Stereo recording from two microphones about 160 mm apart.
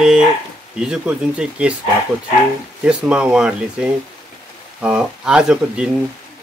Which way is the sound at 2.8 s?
5° right (ahead or behind).